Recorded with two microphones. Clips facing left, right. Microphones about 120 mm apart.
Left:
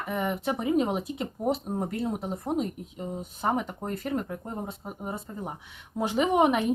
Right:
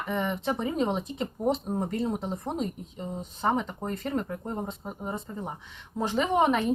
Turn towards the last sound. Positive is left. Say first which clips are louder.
# left 1 dB
turn(degrees=15)  # may be behind; listen again after turning